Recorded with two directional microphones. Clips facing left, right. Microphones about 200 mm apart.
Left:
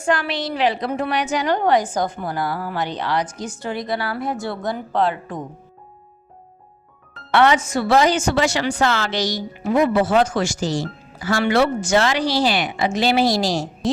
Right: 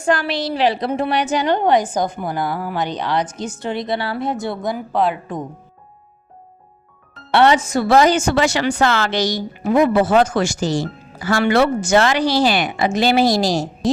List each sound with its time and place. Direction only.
0.0 s a woman's voice: 40° right (ahead or behind); by 5.5 s 15° right (ahead or behind)
7.3 s a woman's voice: 30° right (ahead or behind)